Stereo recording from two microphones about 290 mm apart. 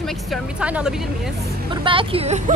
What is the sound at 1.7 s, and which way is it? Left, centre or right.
Speech, centre.